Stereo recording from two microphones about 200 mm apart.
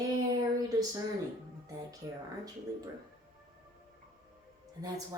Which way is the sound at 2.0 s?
15° right (ahead or behind).